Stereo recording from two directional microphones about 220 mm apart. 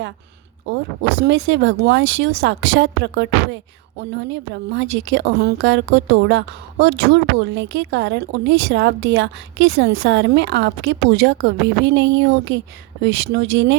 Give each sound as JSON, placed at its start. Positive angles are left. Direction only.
{"t": 1.2, "sound": "a woman's voice", "side_deg": -55}